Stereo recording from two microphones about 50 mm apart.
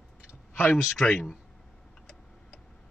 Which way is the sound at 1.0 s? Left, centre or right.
Centre.